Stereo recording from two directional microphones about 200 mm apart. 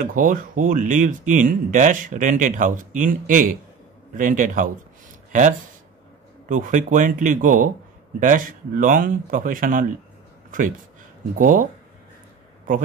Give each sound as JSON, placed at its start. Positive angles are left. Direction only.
{"t": 0.0, "sound": "speech", "side_deg": -45}
{"t": 6.5, "sound": "speech", "side_deg": -40}
{"t": 11.3, "sound": "speech", "side_deg": -40}